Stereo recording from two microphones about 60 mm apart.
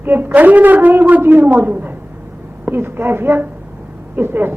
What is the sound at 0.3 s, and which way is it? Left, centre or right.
A man's voice, right.